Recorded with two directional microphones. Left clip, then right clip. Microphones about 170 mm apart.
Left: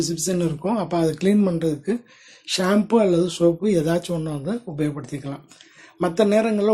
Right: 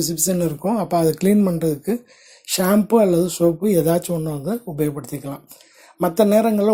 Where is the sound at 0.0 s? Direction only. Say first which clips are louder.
Right 2 dB; 35° right (ahead or behind).